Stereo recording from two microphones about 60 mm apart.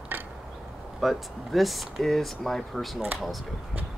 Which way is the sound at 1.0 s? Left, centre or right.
Centre.